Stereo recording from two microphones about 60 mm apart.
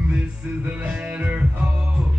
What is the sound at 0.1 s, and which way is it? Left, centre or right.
Music, centre.